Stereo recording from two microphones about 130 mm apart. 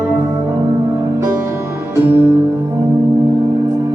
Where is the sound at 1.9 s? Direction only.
15° right (ahead or behind).